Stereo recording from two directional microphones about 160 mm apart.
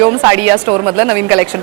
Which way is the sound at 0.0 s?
10° right (ahead or behind).